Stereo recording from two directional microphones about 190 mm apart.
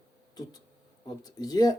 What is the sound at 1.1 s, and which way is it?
Speech, 20° left (ahead or behind).